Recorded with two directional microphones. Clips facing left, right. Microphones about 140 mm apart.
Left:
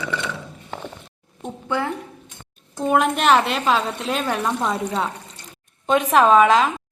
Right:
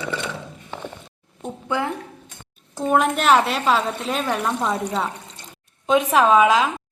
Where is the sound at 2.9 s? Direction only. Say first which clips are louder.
Even; centre (ahead or behind).